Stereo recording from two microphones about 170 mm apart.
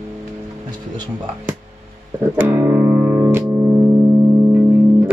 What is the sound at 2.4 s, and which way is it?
Music, 10° right (ahead or behind).